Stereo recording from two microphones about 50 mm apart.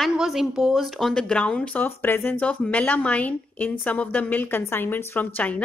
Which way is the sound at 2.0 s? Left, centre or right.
Left.